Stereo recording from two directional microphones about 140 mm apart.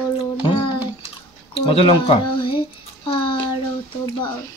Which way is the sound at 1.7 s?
40° left (ahead or behind).